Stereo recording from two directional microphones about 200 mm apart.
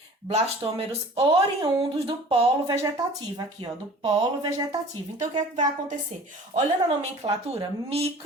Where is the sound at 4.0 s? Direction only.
20° right (ahead or behind).